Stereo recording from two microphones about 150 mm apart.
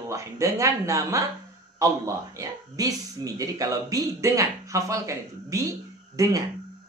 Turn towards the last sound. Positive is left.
turn(degrees=-20)  # may be behind; listen again after turning